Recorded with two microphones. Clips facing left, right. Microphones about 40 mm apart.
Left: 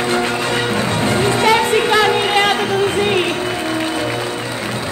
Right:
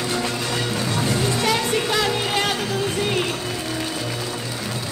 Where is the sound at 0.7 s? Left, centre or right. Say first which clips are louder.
Left 6 dB; left.